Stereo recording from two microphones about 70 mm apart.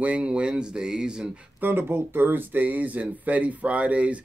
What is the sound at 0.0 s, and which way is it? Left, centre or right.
Speech, centre.